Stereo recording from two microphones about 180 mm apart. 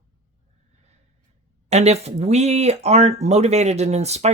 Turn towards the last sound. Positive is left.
turn(degrees=-35)  # may be behind; listen again after turning